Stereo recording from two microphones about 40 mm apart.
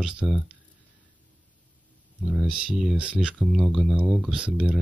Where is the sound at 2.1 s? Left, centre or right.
Right.